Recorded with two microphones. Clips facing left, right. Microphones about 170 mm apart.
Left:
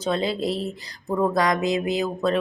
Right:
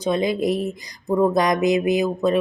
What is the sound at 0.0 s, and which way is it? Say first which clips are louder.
Speech: right 4 dB; 15° right (ahead or behind).